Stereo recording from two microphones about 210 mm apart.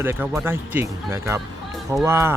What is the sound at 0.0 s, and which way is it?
Speech, 10° right (ahead or behind).